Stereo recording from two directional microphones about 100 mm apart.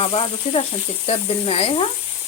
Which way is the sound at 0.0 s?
75° left (ahead or behind).